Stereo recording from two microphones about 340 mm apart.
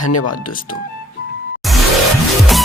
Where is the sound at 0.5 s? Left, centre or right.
Left.